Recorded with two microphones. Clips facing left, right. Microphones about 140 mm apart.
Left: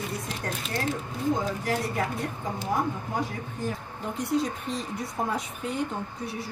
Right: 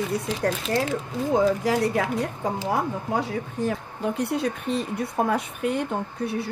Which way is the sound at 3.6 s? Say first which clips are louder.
Right 5 dB; 75° right (ahead or behind).